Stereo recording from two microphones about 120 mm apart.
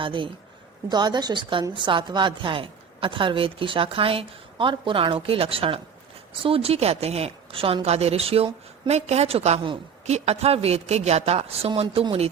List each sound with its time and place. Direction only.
0.0 s a woman's voice: 45° right (ahead or behind)